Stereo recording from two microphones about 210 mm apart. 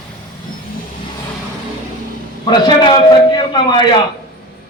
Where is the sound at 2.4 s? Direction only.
20° left (ahead or behind).